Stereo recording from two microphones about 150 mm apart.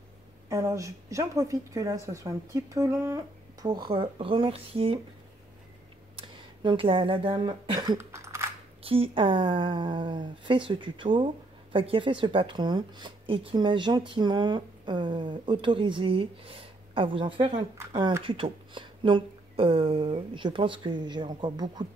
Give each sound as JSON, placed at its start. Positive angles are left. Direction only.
{"t": 0.5, "sound": "a woman's voice", "side_deg": -20}
{"t": 3.6, "sound": "a woman's voice", "side_deg": -30}
{"t": 6.1, "sound": "speech", "side_deg": -30}
{"t": 8.8, "sound": "a woman's voice", "side_deg": -40}